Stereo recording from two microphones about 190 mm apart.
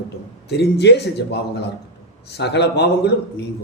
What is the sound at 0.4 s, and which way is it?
A man's voice, 60° left (ahead or behind).